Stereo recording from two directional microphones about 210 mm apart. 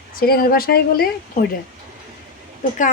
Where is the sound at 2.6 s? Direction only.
40° left (ahead or behind).